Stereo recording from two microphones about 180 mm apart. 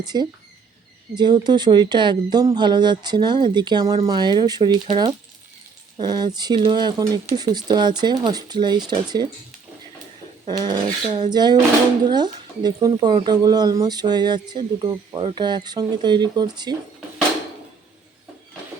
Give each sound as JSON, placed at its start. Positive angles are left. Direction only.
{"t": 0.0, "sound": "speech", "side_deg": -25}
{"t": 10.4, "sound": "speech", "side_deg": -25}